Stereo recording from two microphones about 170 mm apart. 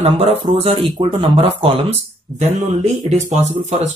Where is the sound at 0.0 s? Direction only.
40° right (ahead or behind).